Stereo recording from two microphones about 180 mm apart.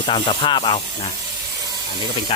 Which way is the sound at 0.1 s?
25° left (ahead or behind).